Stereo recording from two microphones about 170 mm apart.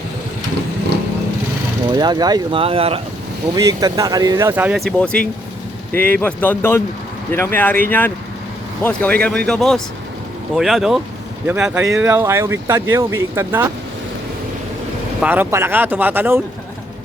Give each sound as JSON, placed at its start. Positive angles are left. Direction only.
{"t": 1.9, "sound": "speech", "side_deg": -25}
{"t": 3.5, "sound": "speech", "side_deg": -20}
{"t": 4.9, "sound": "speech", "side_deg": 5}
{"t": 15.2, "sound": "speech", "side_deg": -10}